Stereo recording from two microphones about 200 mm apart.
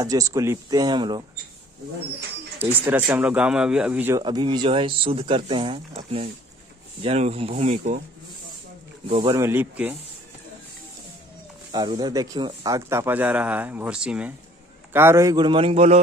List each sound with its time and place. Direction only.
0.0 s speech: 15° right (ahead or behind)
2.9 s speech: 10° right (ahead or behind)
4.2 s speech: 20° right (ahead or behind); by 8.0 s 35° right (ahead or behind)
9.1 s speech: 20° right (ahead or behind)
9.5 s speech: 10° right (ahead or behind)
11.7 s speech: 20° right (ahead or behind)